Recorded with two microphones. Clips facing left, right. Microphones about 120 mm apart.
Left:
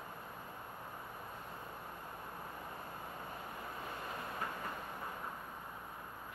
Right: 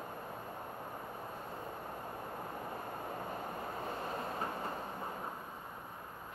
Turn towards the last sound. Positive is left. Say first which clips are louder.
# right 4 dB
turn(degrees=-35)  # may be behind; listen again after turning